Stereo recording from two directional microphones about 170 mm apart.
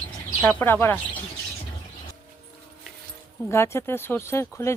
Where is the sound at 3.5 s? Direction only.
15° left (ahead or behind).